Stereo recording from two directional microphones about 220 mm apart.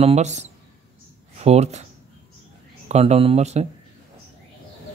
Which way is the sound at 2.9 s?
30° right (ahead or behind).